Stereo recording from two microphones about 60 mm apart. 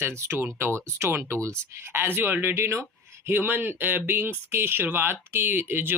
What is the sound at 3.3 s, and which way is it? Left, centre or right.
Speech, right.